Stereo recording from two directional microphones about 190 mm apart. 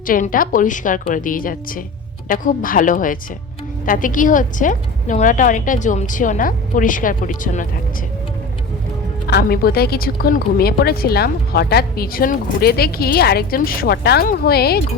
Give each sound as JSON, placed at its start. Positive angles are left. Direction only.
{"t": 0.1, "sound": "a woman's voice", "side_deg": 45}
{"t": 9.2, "sound": "a woman's voice", "side_deg": 55}